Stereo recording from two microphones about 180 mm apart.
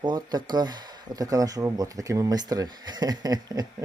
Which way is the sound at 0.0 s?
25° right (ahead or behind).